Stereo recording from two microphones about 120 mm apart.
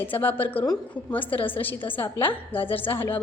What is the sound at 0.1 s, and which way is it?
A woman's voice, 15° left (ahead or behind).